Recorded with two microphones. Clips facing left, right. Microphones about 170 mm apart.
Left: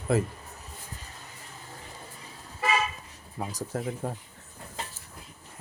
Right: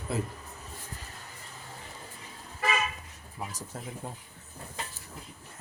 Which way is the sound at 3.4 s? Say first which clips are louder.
Left 5 dB; 35° left (ahead or behind).